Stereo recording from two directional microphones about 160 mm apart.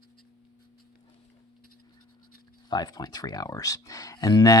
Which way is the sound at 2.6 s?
25° left (ahead or behind).